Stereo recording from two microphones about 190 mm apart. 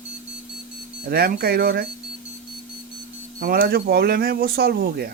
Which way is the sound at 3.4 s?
50° right (ahead or behind).